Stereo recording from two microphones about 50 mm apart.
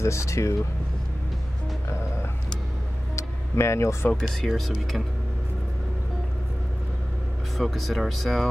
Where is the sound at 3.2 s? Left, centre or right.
Left.